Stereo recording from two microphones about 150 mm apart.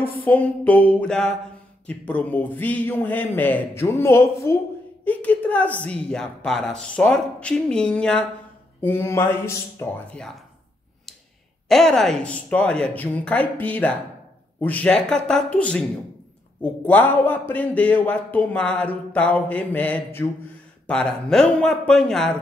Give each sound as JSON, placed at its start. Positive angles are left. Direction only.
{"t": 0.0, "sound": "a man's voice", "side_deg": 10}
{"t": 8.8, "sound": "a man's voice", "side_deg": 15}
{"t": 11.7, "sound": "a man's voice", "side_deg": 0}